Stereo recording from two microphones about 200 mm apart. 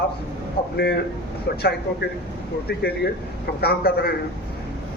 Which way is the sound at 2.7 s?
55° left (ahead or behind).